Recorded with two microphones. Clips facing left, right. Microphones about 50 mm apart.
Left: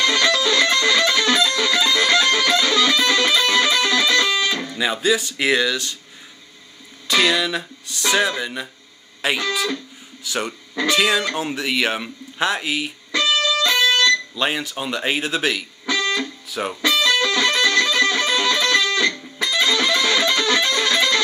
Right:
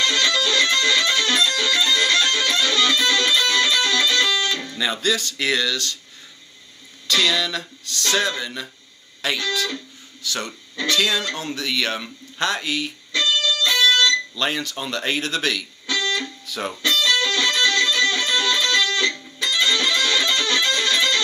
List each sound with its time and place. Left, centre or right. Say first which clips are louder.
0.0 s music: left 2 dB; left
7.1 s speech: left 2 dB; left
13.4 s music: even; left
14.3 s speech: left 2 dB; centre
15.9 s music: left 2 dB; left
16.4 s music: left 2 dB; centre